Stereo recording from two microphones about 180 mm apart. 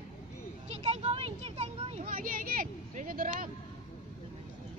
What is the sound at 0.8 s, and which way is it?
Vehicle, 35° right (ahead or behind).